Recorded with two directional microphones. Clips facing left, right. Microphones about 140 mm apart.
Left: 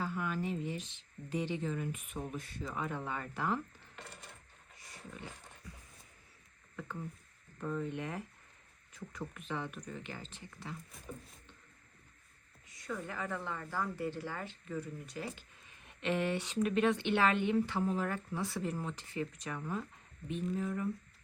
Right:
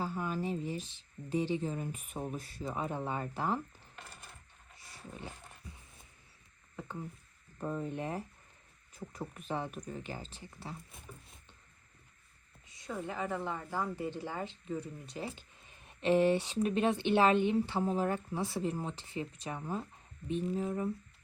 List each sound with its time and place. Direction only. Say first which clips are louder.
0.0 s speech: right 1 dB; 35° right (ahead or behind)
4.8 s a sound: right 2 dB; 30° right (ahead or behind)
7.6 s speech: right 1 dB; 35° right (ahead or behind)
12.6 s a woman's voice: right 2 dB; 25° right (ahead or behind)